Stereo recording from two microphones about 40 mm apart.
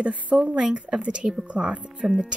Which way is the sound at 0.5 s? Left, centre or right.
Right.